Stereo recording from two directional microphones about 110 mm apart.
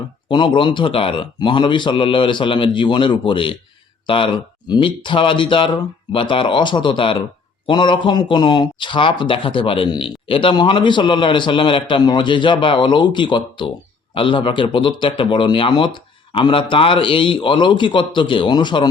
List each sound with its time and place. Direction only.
0.3 s speech: 45° left (ahead or behind)